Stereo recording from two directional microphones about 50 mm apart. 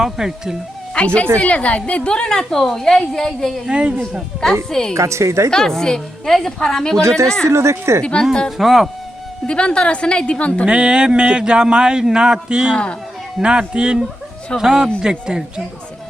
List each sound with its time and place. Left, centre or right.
0.0 s a man's voice: centre
0.9 s a woman's voice: left
3.7 s speech: right
4.7 s a woman's voice: centre
4.9 s a woman's voice: right
5.5 s a woman's voice: centre
7.4 s speech: right
8.2 s a woman's voice: centre
8.5 s speech: centre
9.5 s a woman's voice: centre
10.7 s a man's voice: centre
12.7 s a woman's voice: centre
13.4 s a man's voice: centre